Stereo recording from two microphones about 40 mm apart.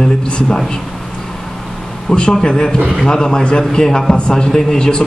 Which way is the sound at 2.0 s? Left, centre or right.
Left.